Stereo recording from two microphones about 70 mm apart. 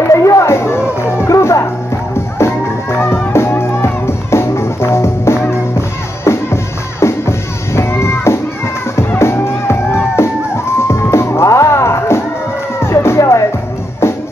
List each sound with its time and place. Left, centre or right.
0.1 s music: left
3.3 s music: left
10.8 s music: left